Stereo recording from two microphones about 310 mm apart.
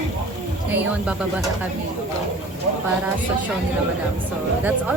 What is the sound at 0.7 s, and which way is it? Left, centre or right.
Speech, centre.